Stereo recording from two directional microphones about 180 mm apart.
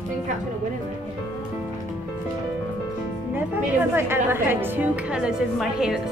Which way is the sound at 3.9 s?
10° right (ahead or behind).